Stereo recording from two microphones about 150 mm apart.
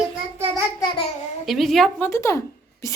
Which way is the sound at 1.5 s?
Centre (ahead or behind).